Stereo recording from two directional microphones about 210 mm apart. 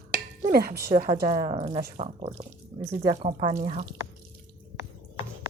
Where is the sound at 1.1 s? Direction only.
25° right (ahead or behind).